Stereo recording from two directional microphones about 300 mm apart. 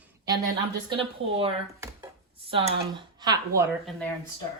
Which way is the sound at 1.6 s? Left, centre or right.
Centre.